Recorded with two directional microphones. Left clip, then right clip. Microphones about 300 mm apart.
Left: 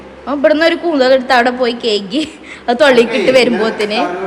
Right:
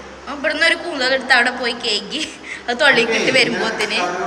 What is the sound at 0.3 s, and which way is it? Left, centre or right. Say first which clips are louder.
A woman's voice: left 6 dB; centre.